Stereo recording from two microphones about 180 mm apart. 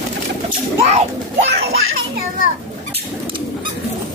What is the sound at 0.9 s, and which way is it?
Child singing, 40° right (ahead or behind).